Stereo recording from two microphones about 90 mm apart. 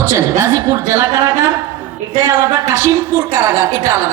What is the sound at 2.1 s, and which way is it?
A woman's voice, 50° right (ahead or behind).